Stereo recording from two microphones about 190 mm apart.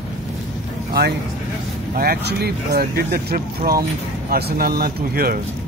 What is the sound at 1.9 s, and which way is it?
Speech, 55° right (ahead or behind).